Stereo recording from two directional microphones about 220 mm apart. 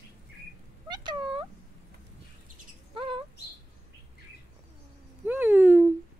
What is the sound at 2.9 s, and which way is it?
Bird, 25° right (ahead or behind).